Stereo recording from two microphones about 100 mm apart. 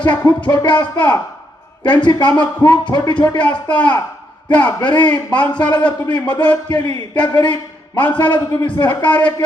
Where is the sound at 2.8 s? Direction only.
45° left (ahead or behind).